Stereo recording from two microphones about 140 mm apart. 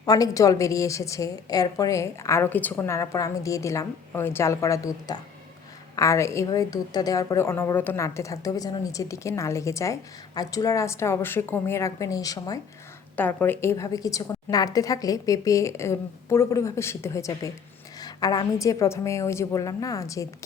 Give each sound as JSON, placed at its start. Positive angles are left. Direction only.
{"t": 0.0, "sound": "a woman's voice", "side_deg": 25}
{"t": 13.1, "sound": "a woman's voice", "side_deg": 15}